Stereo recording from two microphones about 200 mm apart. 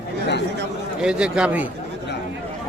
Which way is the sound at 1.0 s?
5° right (ahead or behind).